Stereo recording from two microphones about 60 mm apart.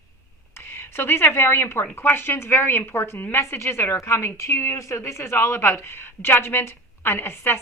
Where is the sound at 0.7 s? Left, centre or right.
Left.